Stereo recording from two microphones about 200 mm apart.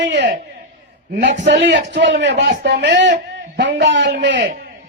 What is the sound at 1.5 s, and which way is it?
A man's voice, 60° right (ahead or behind).